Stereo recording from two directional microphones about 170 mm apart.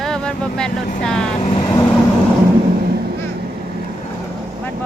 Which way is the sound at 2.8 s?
65° right (ahead or behind).